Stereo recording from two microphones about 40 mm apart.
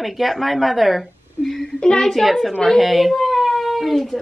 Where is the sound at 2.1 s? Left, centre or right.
Centre.